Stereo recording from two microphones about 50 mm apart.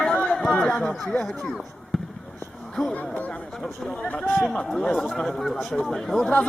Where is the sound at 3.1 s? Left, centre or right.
Left.